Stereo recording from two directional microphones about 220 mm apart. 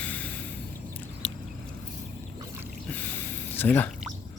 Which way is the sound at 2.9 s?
10° left (ahead or behind).